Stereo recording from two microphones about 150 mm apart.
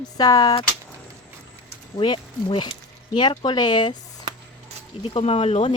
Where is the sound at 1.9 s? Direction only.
35° left (ahead or behind).